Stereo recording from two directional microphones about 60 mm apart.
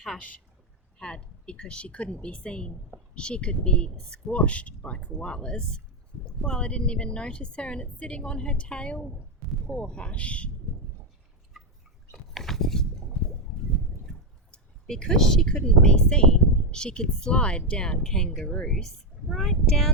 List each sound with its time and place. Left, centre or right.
0.9 s speech: centre
12.1 s a sound: centre
14.5 s speech: centre